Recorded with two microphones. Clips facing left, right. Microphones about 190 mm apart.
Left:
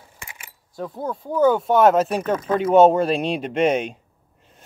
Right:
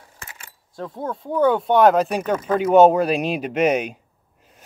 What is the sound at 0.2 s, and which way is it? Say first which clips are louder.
Speech: even; 10° left (ahead or behind).